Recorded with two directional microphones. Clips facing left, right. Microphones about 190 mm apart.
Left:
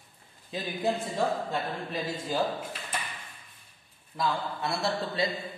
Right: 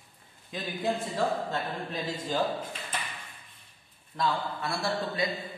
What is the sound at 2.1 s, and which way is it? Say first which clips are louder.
Speech: right 1 dB; 10° left (ahead or behind).